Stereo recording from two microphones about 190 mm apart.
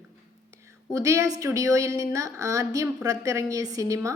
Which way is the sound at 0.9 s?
15° right (ahead or behind).